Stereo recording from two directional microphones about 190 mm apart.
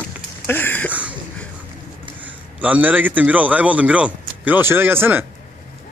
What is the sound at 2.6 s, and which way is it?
Speech, 10° right (ahead or behind).